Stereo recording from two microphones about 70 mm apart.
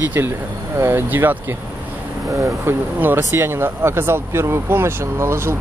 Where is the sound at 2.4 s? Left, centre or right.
Right.